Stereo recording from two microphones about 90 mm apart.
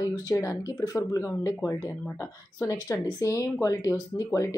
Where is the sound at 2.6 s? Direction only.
35° left (ahead or behind).